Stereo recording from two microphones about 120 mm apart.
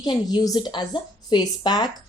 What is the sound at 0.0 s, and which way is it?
A woman's voice, 35° left (ahead or behind).